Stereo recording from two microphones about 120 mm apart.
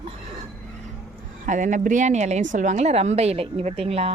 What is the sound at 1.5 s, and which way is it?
A woman's voice, 90° right.